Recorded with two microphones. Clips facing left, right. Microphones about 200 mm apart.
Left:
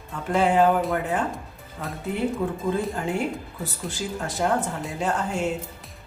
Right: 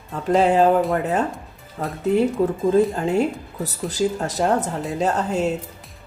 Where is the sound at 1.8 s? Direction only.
40° right (ahead or behind).